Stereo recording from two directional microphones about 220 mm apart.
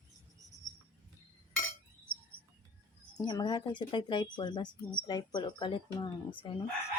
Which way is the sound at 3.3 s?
20° left (ahead or behind).